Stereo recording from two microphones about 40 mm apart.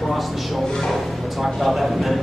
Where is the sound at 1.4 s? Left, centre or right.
Centre.